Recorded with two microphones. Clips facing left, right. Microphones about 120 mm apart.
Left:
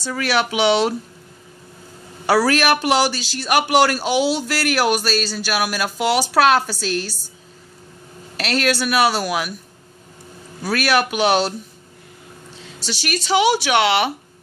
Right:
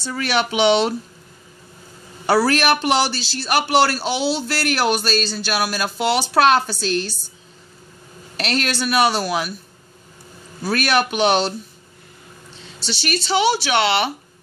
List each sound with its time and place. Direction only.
0.2 s speech: 5° left (ahead or behind)
2.2 s a man's voice: 10° left (ahead or behind)
8.4 s speech: 5° left (ahead or behind)
10.6 s a man's voice: 5° left (ahead or behind)
12.8 s a man's voice: 10° left (ahead or behind)